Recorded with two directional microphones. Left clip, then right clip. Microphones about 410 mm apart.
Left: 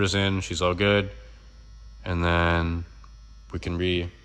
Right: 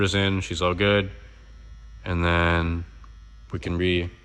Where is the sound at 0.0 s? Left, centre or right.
Centre.